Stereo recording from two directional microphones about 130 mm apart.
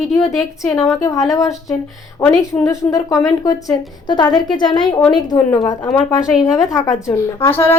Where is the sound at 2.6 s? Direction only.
25° left (ahead or behind).